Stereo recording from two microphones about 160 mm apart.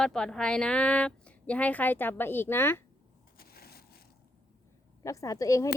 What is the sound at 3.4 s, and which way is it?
Crushing, 75° left (ahead or behind).